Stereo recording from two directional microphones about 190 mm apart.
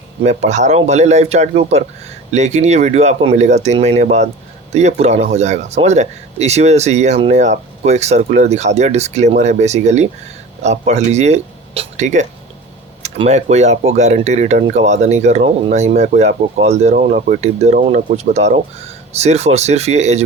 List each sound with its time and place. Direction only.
0.2 s speech: 35° right (ahead or behind)